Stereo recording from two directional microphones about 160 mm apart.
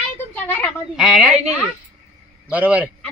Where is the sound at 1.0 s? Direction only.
Centre (ahead or behind).